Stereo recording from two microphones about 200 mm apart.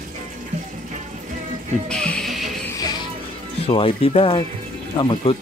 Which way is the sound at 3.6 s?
30° left (ahead or behind).